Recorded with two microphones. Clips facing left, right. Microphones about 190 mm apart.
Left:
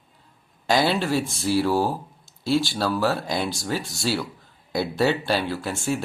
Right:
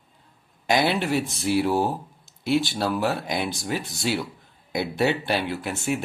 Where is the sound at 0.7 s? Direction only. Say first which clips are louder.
Left 1 dB; 20° right (ahead or behind).